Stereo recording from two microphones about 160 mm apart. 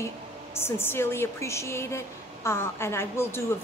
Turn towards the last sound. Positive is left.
turn(degrees=15)  # may be behind; listen again after turning